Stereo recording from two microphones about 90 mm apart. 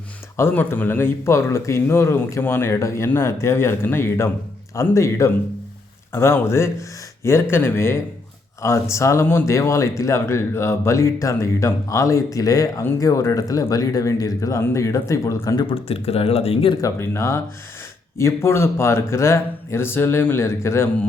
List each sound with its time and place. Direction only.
0.3 s speech: 25° left (ahead or behind)
15.5 s speech: 85° left
16.8 s speech: 35° left (ahead or behind)